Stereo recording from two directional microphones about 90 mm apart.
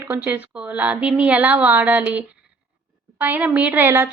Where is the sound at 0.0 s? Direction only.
25° right (ahead or behind).